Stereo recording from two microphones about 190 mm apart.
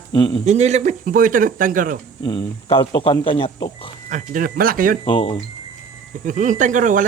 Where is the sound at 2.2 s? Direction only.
30° left (ahead or behind).